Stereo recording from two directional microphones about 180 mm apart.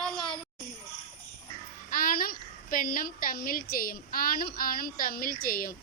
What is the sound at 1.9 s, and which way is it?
A child's voice, 55° left (ahead or behind).